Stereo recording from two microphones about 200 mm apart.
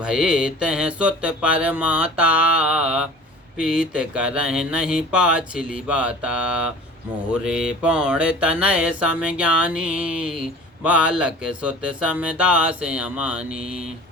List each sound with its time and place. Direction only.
0.0 s mantra: 5° right (ahead or behind)